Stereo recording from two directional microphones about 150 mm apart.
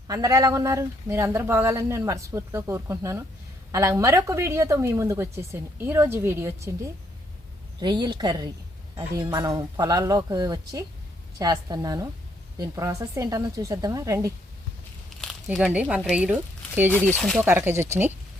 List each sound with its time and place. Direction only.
0.1 s a woman's voice: 25° right (ahead or behind)
7.8 s a woman's voice: 30° right (ahead or behind)
15.1 s crumpling: centre (ahead or behind)
15.6 s speech: 10° right (ahead or behind)
17.2 s speech: centre (ahead or behind)
17.7 s speech: 15° right (ahead or behind)